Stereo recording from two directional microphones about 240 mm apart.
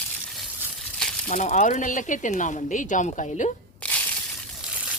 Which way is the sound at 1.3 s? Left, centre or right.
Left.